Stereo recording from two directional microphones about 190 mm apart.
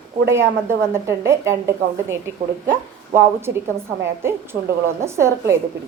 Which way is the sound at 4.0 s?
15° right (ahead or behind).